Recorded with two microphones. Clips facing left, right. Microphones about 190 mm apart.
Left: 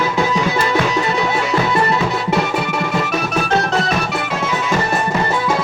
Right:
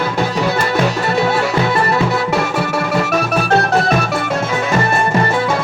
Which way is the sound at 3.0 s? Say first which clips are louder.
Right 3 dB; 60° right (ahead or behind).